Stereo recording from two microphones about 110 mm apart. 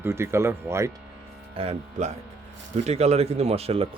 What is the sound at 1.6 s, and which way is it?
Speech, 80° right.